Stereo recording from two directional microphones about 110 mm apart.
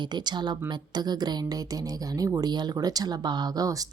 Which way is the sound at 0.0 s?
40° right (ahead or behind).